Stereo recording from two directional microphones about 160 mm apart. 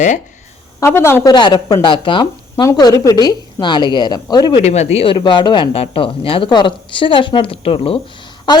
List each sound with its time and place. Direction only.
0.8 s a woman's voice: 15° left (ahead or behind)
4.6 s a woman's voice: 45° left (ahead or behind); by 8.6 s 30° left (ahead or behind)